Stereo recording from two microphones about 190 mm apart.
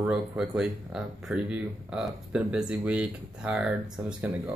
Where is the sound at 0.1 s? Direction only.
5° right (ahead or behind).